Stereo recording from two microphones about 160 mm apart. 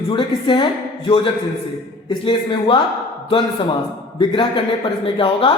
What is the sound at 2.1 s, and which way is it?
Speech, 30° left (ahead or behind).